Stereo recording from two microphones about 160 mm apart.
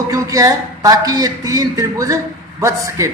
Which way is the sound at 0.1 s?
20° right (ahead or behind).